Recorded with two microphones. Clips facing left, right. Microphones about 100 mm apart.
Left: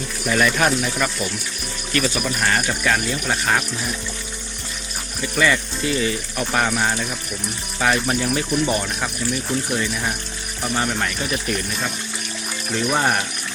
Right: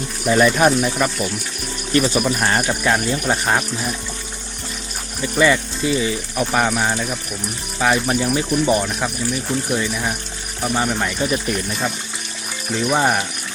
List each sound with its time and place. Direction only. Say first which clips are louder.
0.3 s speech: right 4 dB; 20° right (ahead or behind)
5.4 s speech: right 3 dB; 20° right (ahead or behind)
11.2 s speech: right 4 dB; 25° right (ahead or behind)
12.7 s speech: right 2 dB; 10° right (ahead or behind)